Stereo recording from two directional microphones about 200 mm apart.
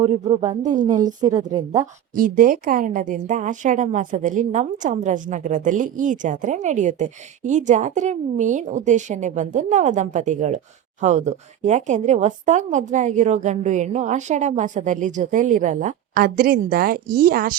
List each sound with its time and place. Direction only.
0.0 s a woman's voice: 30° right (ahead or behind)
1.2 s a woman's voice: 20° right (ahead or behind)
1.8 s a woman's voice: 40° right (ahead or behind)